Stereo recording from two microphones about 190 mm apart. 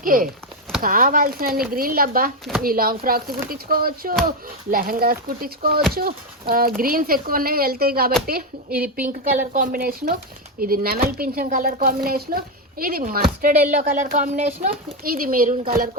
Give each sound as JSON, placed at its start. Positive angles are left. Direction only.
{"t": 0.0, "sound": "speech", "side_deg": -45}